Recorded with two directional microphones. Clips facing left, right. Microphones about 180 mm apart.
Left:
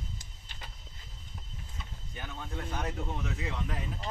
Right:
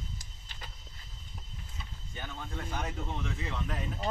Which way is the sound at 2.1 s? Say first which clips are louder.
Even; 5° left (ahead or behind).